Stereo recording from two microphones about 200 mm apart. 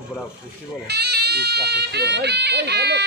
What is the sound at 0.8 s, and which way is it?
Speech, 55° right (ahead or behind).